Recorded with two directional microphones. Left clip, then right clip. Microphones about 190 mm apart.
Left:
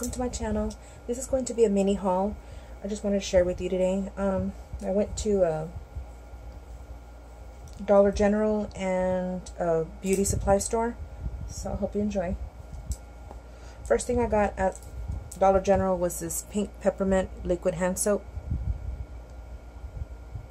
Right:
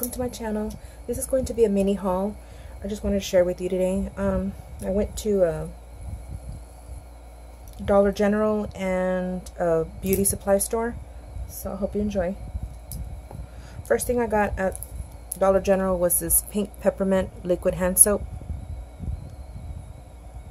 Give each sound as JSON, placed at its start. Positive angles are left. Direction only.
{"t": 0.0, "sound": "a woman's voice", "side_deg": -25}
{"t": 7.8, "sound": "speech", "side_deg": -35}
{"t": 11.5, "sound": "speech", "side_deg": -40}
{"t": 13.8, "sound": "a woman's voice", "side_deg": -35}